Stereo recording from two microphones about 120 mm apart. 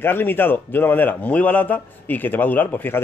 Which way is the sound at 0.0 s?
15° left (ahead or behind).